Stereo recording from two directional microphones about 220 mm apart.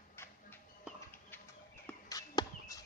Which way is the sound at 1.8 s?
15° left (ahead or behind).